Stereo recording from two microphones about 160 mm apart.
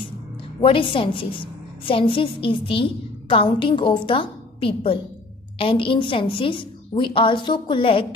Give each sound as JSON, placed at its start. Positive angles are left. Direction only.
{"t": 0.6, "sound": "a woman's voice", "side_deg": 35}